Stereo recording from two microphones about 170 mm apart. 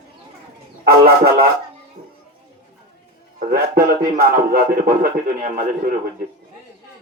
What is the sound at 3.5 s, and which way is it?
A man's voice, 60° right (ahead or behind).